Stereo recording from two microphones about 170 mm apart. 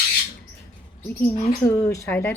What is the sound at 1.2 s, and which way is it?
A woman's voice, 15° left (ahead or behind).